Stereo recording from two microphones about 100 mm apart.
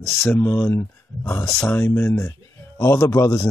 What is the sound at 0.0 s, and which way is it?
Speech, 25° left (ahead or behind).